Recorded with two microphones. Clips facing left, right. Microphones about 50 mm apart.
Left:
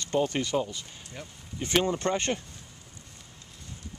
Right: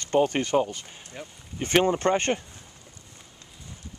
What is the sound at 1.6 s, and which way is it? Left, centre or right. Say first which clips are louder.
Speech: right 4 dB; right.